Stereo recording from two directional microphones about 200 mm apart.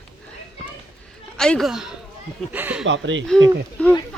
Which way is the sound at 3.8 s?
5° left (ahead or behind).